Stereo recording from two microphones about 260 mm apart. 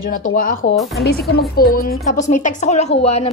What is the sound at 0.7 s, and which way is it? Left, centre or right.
Speech, centre.